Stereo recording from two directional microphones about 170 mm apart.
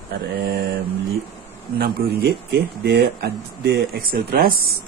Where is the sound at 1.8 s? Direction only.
70° right (ahead or behind).